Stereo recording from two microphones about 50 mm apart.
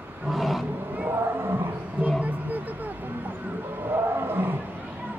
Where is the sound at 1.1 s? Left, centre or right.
Right.